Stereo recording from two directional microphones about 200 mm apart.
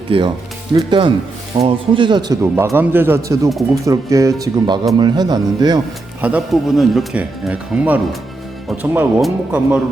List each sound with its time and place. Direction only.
0.1 s a man's voice: 25° right (ahead or behind)
6.2 s a man's voice: 5° right (ahead or behind)